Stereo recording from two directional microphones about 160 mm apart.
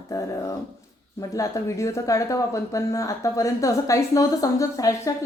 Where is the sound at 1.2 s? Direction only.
20° left (ahead or behind).